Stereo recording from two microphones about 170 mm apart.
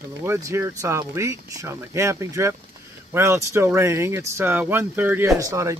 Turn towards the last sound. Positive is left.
turn(degrees=-20)  # may be behind; listen again after turning